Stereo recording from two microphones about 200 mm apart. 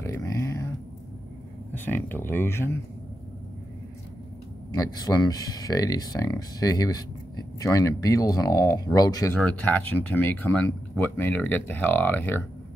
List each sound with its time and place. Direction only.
0.0 s a sound: 15° left (ahead or behind)
1.7 s speech: 10° left (ahead or behind)
4.7 s speech: 20° left (ahead or behind)
9.4 s speech: 5° left (ahead or behind)